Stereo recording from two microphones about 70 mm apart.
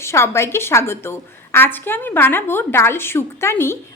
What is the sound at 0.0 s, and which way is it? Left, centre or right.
A woman's voice, left.